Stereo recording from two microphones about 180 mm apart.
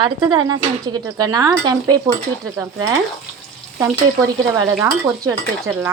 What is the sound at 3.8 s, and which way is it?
Stir, 15° right (ahead or behind).